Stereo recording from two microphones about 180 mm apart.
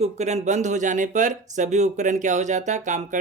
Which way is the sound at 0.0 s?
40° right (ahead or behind).